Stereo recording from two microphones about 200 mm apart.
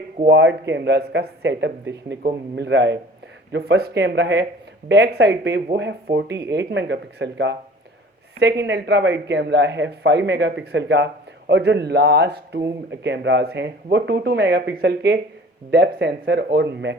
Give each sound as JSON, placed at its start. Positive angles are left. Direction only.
{"t": 0.3, "sound": "speech", "side_deg": -60}